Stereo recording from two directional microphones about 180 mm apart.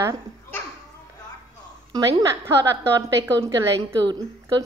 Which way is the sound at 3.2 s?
20° right (ahead or behind).